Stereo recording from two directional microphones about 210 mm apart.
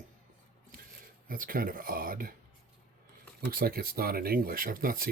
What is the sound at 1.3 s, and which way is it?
Speech, 40° right (ahead or behind).